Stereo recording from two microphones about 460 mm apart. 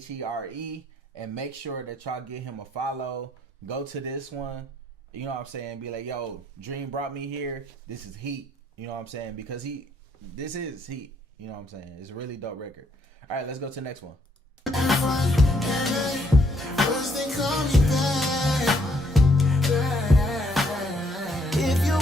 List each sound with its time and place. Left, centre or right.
0.2 s speech: right
7.9 s speech: right
8.8 s speech: right
10.9 s speech: right
11.4 s speech: right
14.6 s music: centre